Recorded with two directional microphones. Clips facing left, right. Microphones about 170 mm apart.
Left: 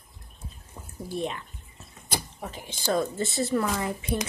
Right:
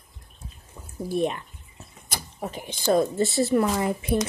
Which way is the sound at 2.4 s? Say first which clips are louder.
Right 5 dB; 15° right (ahead or behind).